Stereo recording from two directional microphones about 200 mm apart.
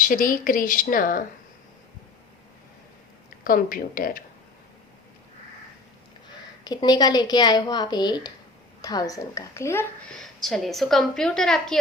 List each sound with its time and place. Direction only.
0.0 s a woman's voice: 45° left (ahead or behind)
3.4 s a woman's voice: 45° left (ahead or behind)
6.7 s a woman's voice: 20° left (ahead or behind); by 11.8 s centre (ahead or behind)